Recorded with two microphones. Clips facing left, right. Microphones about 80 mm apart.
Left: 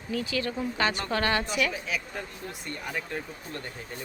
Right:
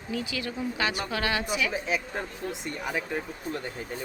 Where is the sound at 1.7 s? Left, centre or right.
Right; by 3.6 s centre.